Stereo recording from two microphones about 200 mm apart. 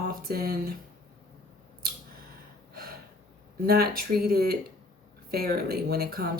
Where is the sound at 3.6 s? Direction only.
50° right (ahead or behind).